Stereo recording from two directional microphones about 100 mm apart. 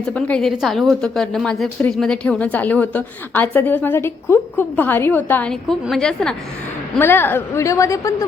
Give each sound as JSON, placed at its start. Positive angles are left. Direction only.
{"t": 0.0, "sound": "a woman's voice", "side_deg": 15}
{"t": 0.4, "sound": "a woman's voice", "side_deg": 0}
{"t": 5.9, "sound": "a woman's voice", "side_deg": 5}
{"t": 7.0, "sound": "a woman's voice", "side_deg": 20}